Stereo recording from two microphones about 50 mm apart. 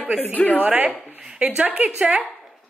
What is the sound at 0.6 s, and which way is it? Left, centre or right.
A woman's voice, right.